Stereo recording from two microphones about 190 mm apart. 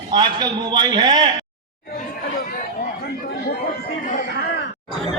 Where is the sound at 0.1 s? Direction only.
20° right (ahead or behind).